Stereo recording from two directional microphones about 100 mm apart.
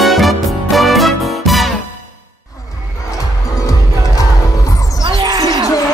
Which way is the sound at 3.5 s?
35° left (ahead or behind).